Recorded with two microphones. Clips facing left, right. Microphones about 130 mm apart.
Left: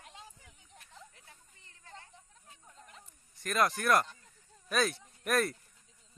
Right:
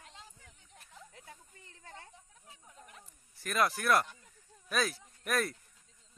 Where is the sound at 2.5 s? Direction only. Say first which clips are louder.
Right 1 dB; 5° right (ahead or behind).